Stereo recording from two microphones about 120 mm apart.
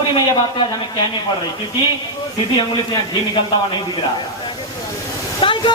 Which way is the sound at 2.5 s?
35° left (ahead or behind).